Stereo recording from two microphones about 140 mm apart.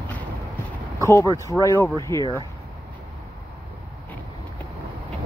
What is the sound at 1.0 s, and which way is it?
Speech, 20° left (ahead or behind).